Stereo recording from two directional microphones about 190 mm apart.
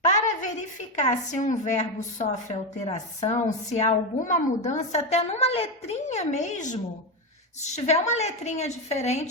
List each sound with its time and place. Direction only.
0.9 s a woman's voice: 40° left (ahead or behind)